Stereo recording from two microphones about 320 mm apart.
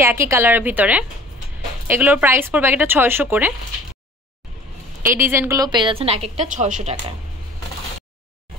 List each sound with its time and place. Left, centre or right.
0.0 s a woman's voice: centre
5.1 s a woman's voice: centre